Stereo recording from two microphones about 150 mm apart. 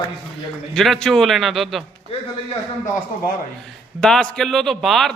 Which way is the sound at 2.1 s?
40° left (ahead or behind).